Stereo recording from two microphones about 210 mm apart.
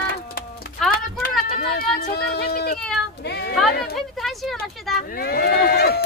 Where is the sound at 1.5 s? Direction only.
45° left (ahead or behind).